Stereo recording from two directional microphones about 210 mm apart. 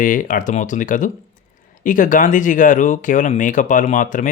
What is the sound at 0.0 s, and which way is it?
Speech, 40° left (ahead or behind).